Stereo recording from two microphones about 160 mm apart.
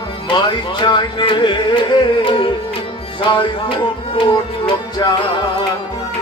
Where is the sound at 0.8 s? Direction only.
30° left (ahead or behind).